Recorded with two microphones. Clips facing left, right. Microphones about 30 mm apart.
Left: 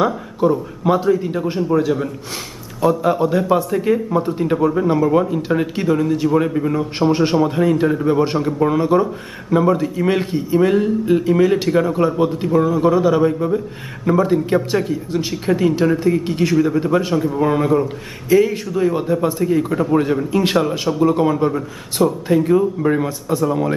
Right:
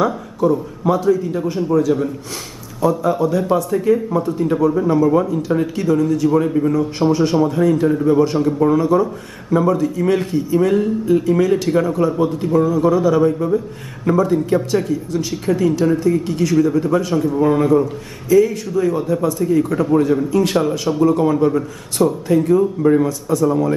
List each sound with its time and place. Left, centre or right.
0.0 s a man's voice: left
6.8 s a man's voice: left
8.7 s a man's voice: left
14.1 s a man's voice: left
17.1 s a man's voice: centre
18.3 s a man's voice: left